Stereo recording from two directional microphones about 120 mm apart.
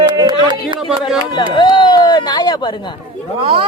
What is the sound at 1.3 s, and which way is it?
Speech, 40° left (ahead or behind).